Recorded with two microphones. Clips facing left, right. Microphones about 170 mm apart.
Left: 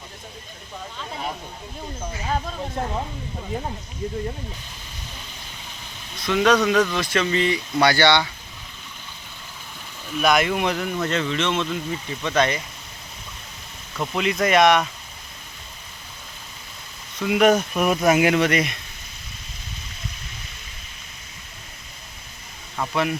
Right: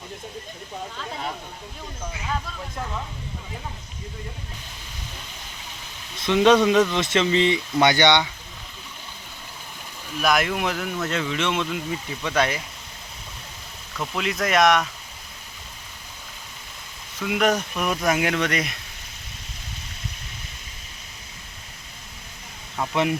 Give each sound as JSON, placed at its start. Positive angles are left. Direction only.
{"t": 2.2, "sound": "speech", "side_deg": 40}
{"t": 6.1, "sound": "speech", "side_deg": -25}
{"t": 10.2, "sound": "speech", "side_deg": 0}
{"t": 14.1, "sound": "speech", "side_deg": 0}
{"t": 17.2, "sound": "speech", "side_deg": 0}